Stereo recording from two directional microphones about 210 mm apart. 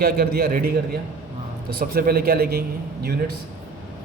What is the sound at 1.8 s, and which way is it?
Speech, 45° right (ahead or behind).